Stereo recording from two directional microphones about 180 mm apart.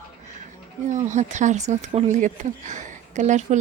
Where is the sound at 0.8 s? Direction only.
40° right (ahead or behind).